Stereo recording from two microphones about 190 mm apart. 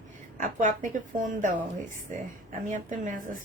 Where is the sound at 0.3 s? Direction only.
45° right (ahead or behind).